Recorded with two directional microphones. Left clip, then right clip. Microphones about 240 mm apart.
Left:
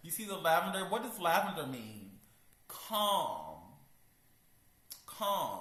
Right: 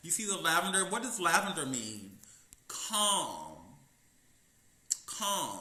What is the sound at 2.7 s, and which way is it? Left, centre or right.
Speech, centre.